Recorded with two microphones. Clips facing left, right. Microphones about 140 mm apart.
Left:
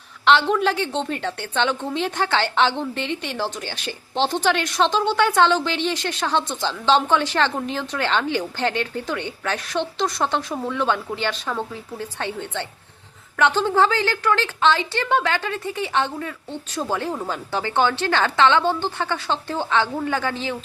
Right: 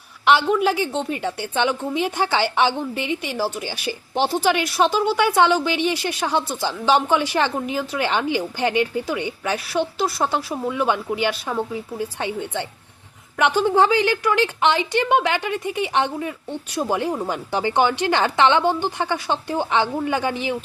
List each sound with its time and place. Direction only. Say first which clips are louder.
0.3 s a woman's voice: right 1 dB; 10° right (ahead or behind)